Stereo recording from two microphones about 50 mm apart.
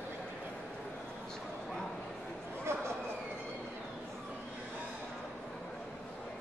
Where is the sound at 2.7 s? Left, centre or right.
Right.